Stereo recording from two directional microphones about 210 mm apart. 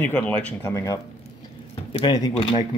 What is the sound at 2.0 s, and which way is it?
Speech, 20° left (ahead or behind).